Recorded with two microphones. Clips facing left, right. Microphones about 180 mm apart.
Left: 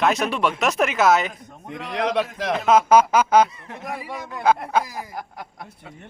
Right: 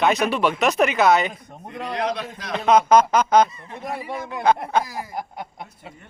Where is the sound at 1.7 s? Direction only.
90° left.